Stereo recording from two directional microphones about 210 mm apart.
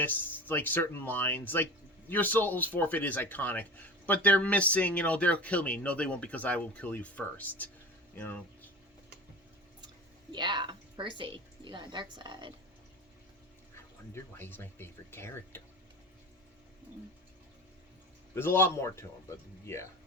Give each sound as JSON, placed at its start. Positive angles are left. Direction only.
{"t": 0.0, "sound": "speech", "side_deg": 10}
{"t": 10.3, "sound": "a woman's voice", "side_deg": -20}
{"t": 14.1, "sound": "speech", "side_deg": 10}
{"t": 18.3, "sound": "speech", "side_deg": 10}